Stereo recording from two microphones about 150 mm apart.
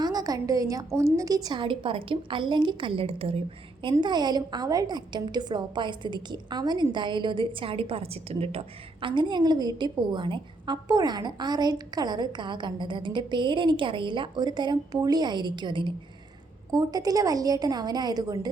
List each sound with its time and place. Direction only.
0.0 s a woman's voice: 25° right (ahead or behind)
3.9 s a woman's voice: 30° right (ahead or behind)